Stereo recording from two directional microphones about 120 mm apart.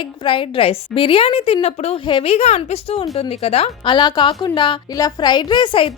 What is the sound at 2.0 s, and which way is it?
A woman's voice, 45° left (ahead or behind).